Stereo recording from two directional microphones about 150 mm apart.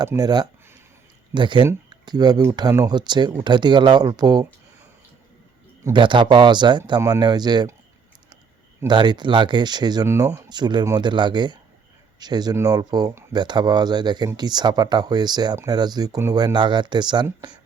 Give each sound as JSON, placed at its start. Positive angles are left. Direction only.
{"t": 0.0, "sound": "speech", "side_deg": -25}
{"t": 5.9, "sound": "speech", "side_deg": -30}
{"t": 8.9, "sound": "speech", "side_deg": -30}